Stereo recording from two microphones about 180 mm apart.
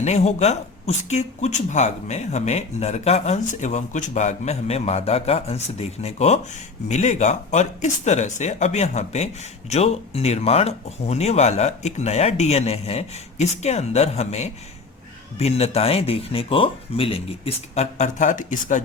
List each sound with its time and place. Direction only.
0.0 s speech: 40° left (ahead or behind)